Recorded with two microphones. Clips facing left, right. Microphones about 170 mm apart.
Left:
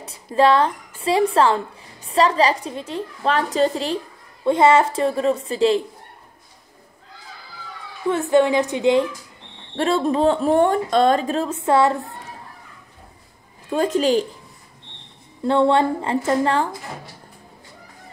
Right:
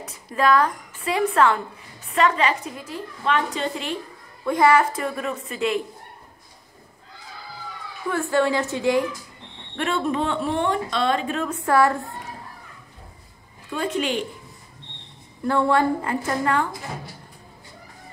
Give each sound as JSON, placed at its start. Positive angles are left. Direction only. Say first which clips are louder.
{"t": 0.0, "sound": "a woman's voice", "louder": "left 5 dB", "side_deg": 30}
{"t": 8.1, "sound": "a child's voice", "louder": "left 5 dB", "side_deg": 20}
{"t": 9.8, "sound": "speech", "louder": "left 5 dB", "side_deg": 35}
{"t": 13.7, "sound": "speech", "louder": "left 7 dB", "side_deg": 40}
{"t": 15.4, "sound": "a child's voice", "louder": "left 3 dB", "side_deg": 25}